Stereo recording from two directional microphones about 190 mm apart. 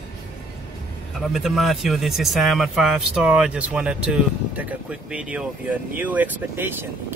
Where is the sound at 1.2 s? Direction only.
Centre (ahead or behind).